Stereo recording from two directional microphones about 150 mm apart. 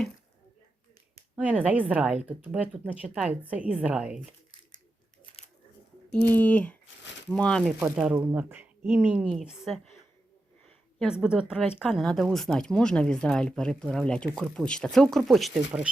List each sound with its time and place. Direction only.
1.4 s a woman's voice: 10° right (ahead or behind)
5.4 s a sound: 40° left (ahead or behind)
6.3 s speech: 10° left (ahead or behind)
7.9 s a woman's voice: 10° right (ahead or behind)